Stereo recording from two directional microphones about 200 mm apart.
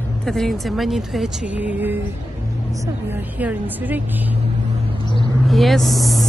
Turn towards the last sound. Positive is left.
turn(degrees=0)  # may be behind; listen again after turning